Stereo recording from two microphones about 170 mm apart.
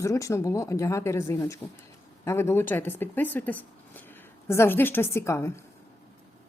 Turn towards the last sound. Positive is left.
turn(degrees=15)  # may be behind; listen again after turning